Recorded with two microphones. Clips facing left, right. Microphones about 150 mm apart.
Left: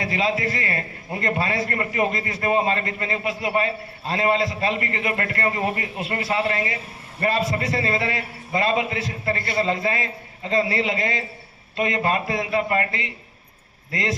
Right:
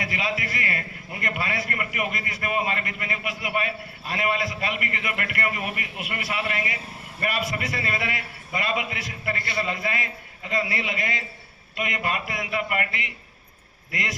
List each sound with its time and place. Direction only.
0.0 s a man's voice: 25° left (ahead or behind)